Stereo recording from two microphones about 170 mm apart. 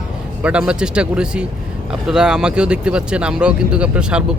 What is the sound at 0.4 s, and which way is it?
Speech, 5° right (ahead or behind).